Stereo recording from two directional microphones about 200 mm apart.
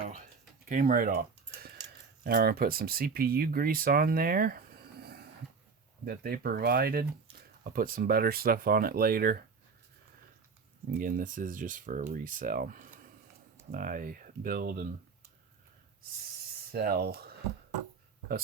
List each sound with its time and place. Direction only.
0.0 s a sound: 40° right (ahead or behind)
0.7 s speech: 45° right (ahead or behind)
1.5 s a sound: 50° right (ahead or behind)
2.2 s speech: 50° right (ahead or behind)
10.9 s speech: 45° right (ahead or behind)
16.7 s speech: 50° right (ahead or behind)